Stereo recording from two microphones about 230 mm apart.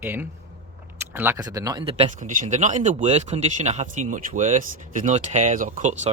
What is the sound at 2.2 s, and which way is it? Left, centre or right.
Speech, right.